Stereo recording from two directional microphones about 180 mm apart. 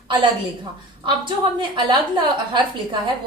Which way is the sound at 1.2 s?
25° right (ahead or behind).